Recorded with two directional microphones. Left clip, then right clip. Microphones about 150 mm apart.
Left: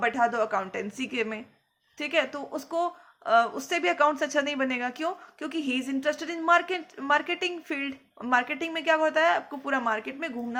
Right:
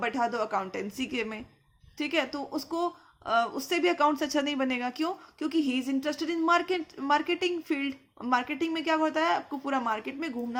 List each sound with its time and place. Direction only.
0.0 s a woman's voice: 50° right (ahead or behind)